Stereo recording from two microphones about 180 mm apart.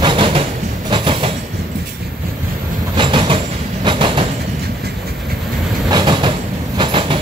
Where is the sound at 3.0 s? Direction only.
25° right (ahead or behind).